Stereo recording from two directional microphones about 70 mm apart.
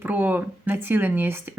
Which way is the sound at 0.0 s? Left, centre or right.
Right.